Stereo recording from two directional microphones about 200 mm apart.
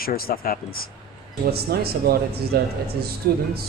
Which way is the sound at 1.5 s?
50° right (ahead or behind).